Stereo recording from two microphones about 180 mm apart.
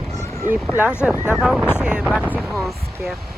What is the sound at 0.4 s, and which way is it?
Speech, 10° right (ahead or behind).